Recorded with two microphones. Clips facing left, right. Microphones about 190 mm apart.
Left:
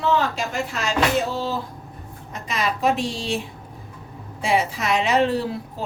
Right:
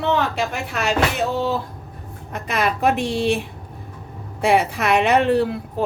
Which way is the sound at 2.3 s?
60° right (ahead or behind).